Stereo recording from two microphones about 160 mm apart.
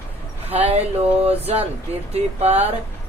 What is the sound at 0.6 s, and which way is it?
Speech, 40° right (ahead or behind).